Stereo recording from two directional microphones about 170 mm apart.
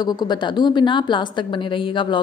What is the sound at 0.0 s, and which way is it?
A woman's voice, 25° left (ahead or behind).